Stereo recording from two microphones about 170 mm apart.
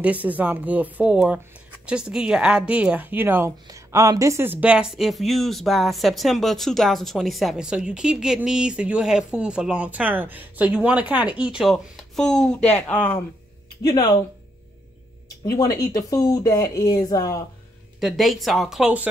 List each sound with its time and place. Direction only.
0.0 s speech: 10° right (ahead or behind); by 13.2 s 10° left (ahead or behind)
13.8 s speech: 25° left (ahead or behind)
15.2 s speech: 20° left (ahead or behind)
18.0 s speech: centre (ahead or behind)